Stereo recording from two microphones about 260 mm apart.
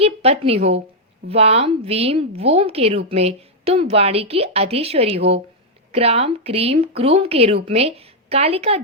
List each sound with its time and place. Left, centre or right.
0.0 s a woman's voice: right